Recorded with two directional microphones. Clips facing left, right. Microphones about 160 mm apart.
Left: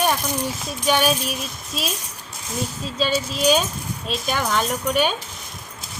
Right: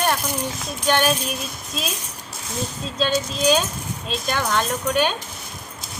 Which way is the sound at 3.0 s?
5° left (ahead or behind).